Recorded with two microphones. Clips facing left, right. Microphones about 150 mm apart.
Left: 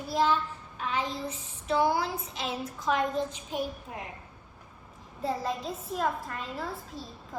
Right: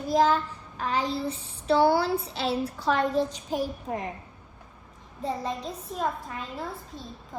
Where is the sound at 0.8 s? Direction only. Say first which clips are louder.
Right 4 dB; 35° right (ahead or behind).